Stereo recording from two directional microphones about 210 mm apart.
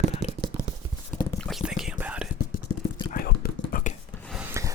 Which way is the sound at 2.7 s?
90° left.